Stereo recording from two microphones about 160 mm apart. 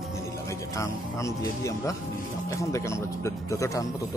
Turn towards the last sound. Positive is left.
turn(degrees=20)  # may be behind; listen again after turning